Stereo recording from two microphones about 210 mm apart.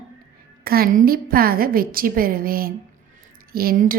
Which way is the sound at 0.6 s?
45° right (ahead or behind).